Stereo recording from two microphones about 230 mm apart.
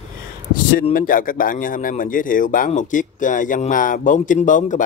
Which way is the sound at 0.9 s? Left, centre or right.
Left.